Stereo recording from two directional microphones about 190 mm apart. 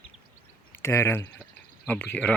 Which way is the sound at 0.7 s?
15° left (ahead or behind).